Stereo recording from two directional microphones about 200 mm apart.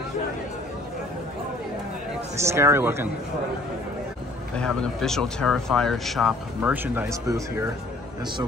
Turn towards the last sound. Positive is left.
turn(degrees=-15)  # may be behind; listen again after turning